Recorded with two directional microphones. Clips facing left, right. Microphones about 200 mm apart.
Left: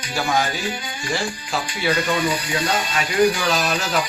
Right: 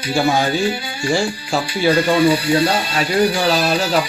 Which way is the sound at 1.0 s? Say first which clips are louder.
Right 8 dB; 30° right (ahead or behind).